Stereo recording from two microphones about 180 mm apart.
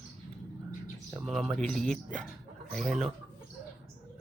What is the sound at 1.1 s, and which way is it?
Speech, centre (ahead or behind).